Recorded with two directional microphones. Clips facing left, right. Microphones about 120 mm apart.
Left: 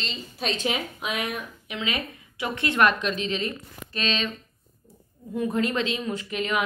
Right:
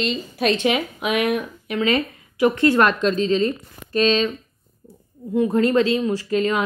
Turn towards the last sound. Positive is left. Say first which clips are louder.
# right 6 dB
turn(degrees=-35)  # may be behind; listen again after turning